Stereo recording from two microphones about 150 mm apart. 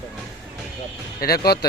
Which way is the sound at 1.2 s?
90° left.